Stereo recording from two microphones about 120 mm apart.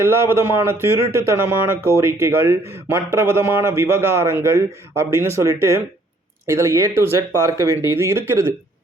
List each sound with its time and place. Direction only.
0.0 s speech: 20° right (ahead or behind)